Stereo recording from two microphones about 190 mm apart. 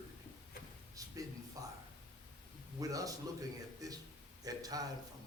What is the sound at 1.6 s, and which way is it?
Speech, 20° right (ahead or behind).